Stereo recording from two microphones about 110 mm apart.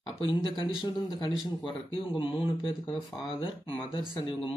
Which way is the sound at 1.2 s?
50° left (ahead or behind).